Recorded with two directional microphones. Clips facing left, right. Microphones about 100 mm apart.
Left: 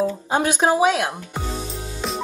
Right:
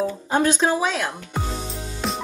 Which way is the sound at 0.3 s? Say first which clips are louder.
Even; 15° left (ahead or behind).